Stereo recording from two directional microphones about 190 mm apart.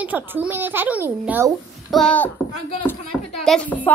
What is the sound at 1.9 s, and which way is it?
Speech, 5° left (ahead or behind).